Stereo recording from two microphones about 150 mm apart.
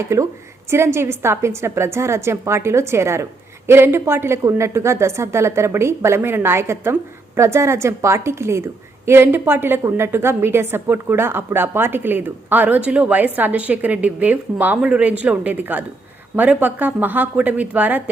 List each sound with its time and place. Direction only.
0.0 s a woman's voice: 20° right (ahead or behind)